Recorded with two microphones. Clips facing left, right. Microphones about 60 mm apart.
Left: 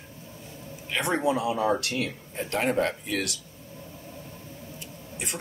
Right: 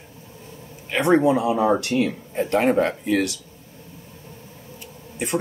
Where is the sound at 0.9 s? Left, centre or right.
Right.